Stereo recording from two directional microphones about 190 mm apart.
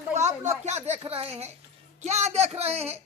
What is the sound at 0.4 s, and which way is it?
A woman's voice, 40° right (ahead or behind).